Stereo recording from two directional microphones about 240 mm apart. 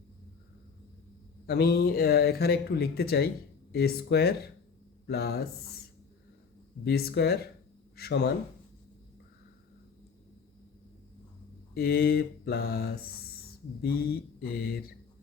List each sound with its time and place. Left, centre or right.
1.5 s speech: left
6.8 s speech: left
11.7 s speech: left